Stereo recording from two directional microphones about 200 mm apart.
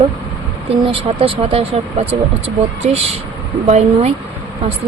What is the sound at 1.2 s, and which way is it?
Speech, 30° right (ahead or behind).